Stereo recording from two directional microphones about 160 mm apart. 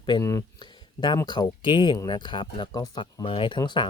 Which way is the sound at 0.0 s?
25° left (ahead or behind).